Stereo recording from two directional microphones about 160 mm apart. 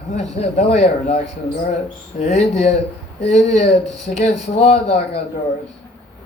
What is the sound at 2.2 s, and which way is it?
A man's voice, 45° left (ahead or behind).